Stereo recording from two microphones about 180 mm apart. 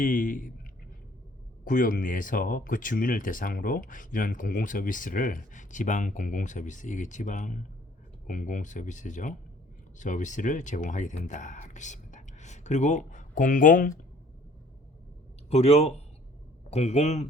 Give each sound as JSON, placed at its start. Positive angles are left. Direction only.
{"t": 0.0, "sound": "speech", "side_deg": 50}
{"t": 1.6, "sound": "speech", "side_deg": 50}
{"t": 15.4, "sound": "a man's voice", "side_deg": 35}